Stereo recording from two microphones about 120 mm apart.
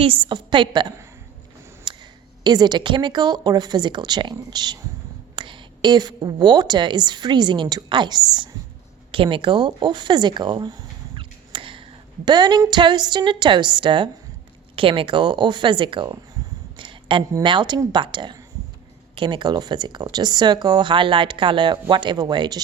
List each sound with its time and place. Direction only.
0.0 s a woman's voice: 45° right (ahead or behind)
16.7 s a sound: 45° right (ahead or behind)
17.4 s speech: 40° right (ahead or behind)